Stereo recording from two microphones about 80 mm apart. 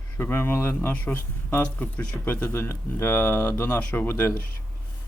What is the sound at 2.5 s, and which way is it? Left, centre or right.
Speech, left.